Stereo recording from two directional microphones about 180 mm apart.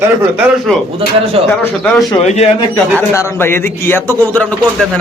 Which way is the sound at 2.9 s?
10° left (ahead or behind).